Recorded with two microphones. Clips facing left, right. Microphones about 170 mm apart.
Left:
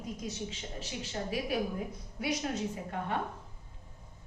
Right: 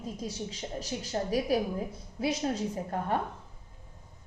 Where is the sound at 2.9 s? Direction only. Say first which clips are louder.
Right 5 dB; 40° right (ahead or behind).